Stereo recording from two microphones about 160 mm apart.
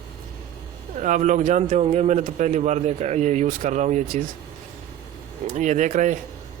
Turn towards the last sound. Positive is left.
turn(degrees=-50)  # may be behind; listen again after turning